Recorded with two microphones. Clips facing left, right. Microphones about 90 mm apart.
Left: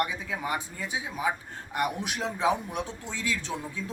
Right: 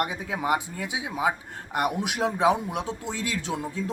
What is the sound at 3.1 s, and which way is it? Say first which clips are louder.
Speech: right 2 dB; 75° right (ahead or behind).